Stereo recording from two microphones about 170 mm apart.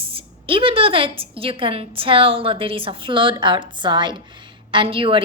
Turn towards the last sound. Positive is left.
turn(degrees=-30)  # may be behind; listen again after turning